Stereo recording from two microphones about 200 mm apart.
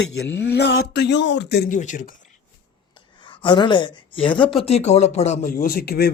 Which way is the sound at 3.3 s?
25° left (ahead or behind).